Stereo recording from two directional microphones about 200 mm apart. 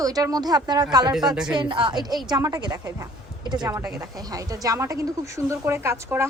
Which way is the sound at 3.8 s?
5° right (ahead or behind).